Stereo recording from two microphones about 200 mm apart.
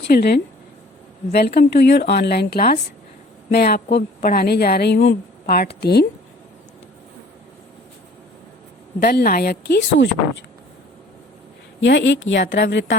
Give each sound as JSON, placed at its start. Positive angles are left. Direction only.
{"t": 0.1, "sound": "a woman's voice", "side_deg": 55}
{"t": 9.0, "sound": "a woman's voice", "side_deg": 55}
{"t": 11.8, "sound": "a woman's voice", "side_deg": 65}